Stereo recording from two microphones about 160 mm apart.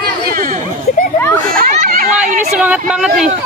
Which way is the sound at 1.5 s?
60° right (ahead or behind).